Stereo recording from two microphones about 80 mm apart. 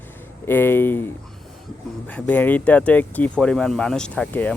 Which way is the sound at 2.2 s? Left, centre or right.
Left.